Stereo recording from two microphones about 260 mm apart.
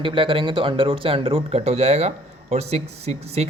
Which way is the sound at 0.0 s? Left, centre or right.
Centre.